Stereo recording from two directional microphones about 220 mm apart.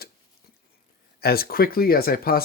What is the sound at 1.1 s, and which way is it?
Speech, 45° left (ahead or behind).